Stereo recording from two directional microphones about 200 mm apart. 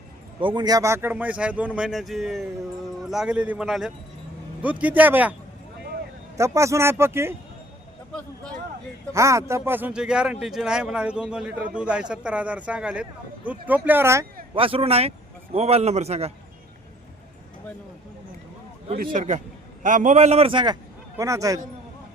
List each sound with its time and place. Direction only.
0.3 s a man's voice: 25° right (ahead or behind)
6.3 s speech: 15° right (ahead or behind)
9.1 s a man's voice: 15° right (ahead or behind)
14.5 s a man's voice: 25° right (ahead or behind)
18.9 s a man's voice: 35° right (ahead or behind); by 21.6 s 15° right (ahead or behind)